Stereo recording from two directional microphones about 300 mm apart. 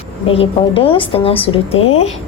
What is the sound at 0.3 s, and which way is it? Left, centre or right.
A woman's voice, centre.